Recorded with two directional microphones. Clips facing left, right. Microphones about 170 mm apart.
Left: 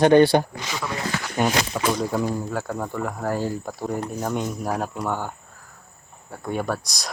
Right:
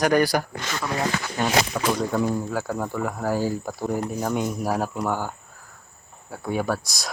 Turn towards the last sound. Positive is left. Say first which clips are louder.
# right 1 dB
turn(degrees=0)  # may be behind; listen again after turning